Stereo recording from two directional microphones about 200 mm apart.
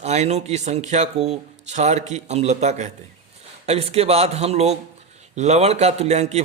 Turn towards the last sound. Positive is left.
turn(degrees=-35)  # may be behind; listen again after turning